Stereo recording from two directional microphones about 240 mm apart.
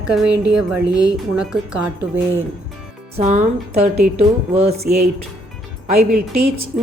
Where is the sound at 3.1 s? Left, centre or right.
Right.